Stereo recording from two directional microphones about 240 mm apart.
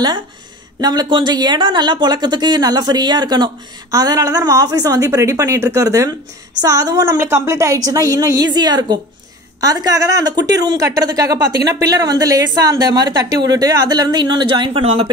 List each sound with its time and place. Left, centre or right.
0.7 s speech: centre